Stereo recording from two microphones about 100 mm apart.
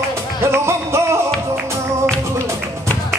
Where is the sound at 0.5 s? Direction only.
25° right (ahead or behind).